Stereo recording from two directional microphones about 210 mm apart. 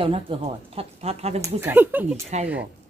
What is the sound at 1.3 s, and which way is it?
Speech, 10° right (ahead or behind).